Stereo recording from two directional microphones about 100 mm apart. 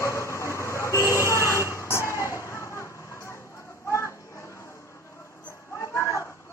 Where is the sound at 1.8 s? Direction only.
25° left (ahead or behind).